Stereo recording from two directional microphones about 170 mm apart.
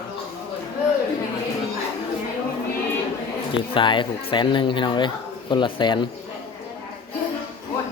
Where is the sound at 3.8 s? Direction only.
30° left (ahead or behind).